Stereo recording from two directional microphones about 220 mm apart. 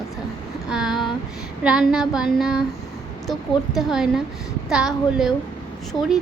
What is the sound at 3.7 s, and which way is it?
Child singing, centre (ahead or behind).